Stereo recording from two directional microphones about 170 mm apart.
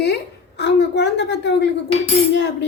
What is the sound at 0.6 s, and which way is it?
A woman's voice, 90° left.